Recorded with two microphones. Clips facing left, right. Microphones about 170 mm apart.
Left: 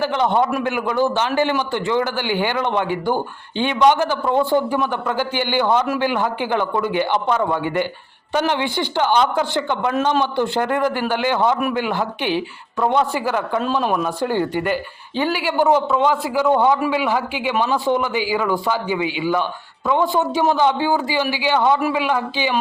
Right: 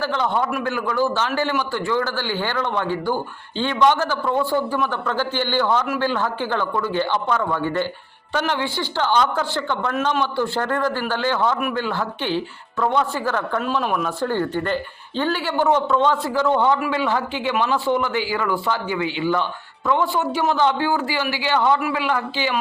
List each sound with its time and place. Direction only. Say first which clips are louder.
0.0 s a man's voice: left 4 dB; 20° left (ahead or behind)
13.6 s a man's voice: left 2 dB; 25° left (ahead or behind)
14.2 s a man's voice: left 2 dB; 15° left (ahead or behind)